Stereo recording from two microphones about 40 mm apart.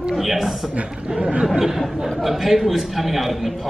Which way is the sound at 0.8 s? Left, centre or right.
Right.